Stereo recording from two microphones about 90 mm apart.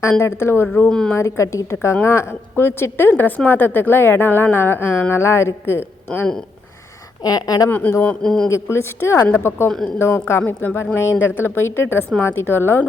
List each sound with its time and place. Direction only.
0.1 s a woman's voice: 30° left (ahead or behind)
0.9 s a woman's voice: 10° left (ahead or behind)
1.1 s a woman's voice: 30° left (ahead or behind)
7.2 s a woman's voice: 45° left (ahead or behind)
7.9 s a woman's voice: 35° left (ahead or behind)
8.2 s a woman's voice: 5° left (ahead or behind)
8.4 s a woman's voice: 30° left (ahead or behind)
9.6 s a woman's voice: 5° left (ahead or behind)
10.0 s a woman's voice: 30° left (ahead or behind)
10.4 s a woman's voice: 15° left (ahead or behind)
10.9 s a woman's voice: 30° left (ahead or behind)